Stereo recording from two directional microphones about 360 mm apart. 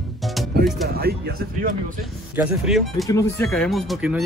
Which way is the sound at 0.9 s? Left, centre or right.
Right.